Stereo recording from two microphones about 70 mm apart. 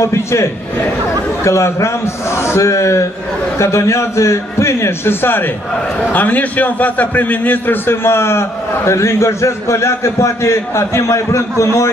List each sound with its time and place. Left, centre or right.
0.0 s a man's voice: left